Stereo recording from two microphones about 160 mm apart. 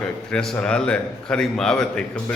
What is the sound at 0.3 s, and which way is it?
A man's voice, 5° left (ahead or behind).